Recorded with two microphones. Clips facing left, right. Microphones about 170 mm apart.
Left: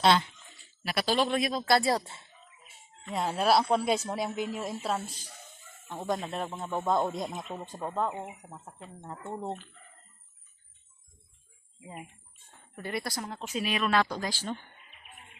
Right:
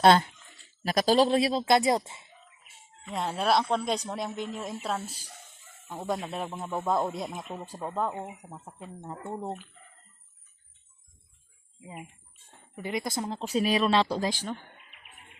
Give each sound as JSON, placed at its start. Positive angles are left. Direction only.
{"t": 0.0, "sound": "speech", "side_deg": -45}
{"t": 3.0, "sound": "speech", "side_deg": 0}
{"t": 12.5, "sound": "speech", "side_deg": -15}